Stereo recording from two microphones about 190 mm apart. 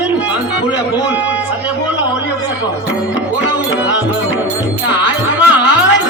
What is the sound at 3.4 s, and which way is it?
Music, 70° left (ahead or behind).